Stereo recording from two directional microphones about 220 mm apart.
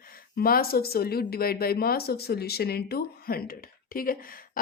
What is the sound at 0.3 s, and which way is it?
A woman's voice, 45° left (ahead or behind).